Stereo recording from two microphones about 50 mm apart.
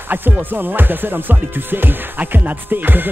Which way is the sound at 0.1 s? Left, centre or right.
Right.